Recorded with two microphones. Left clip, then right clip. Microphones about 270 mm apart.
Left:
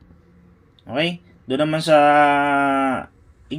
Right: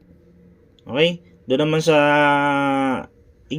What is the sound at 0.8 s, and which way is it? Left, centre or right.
Speech, centre.